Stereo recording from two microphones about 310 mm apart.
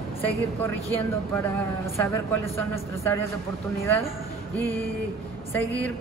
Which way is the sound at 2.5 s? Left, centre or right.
Centre.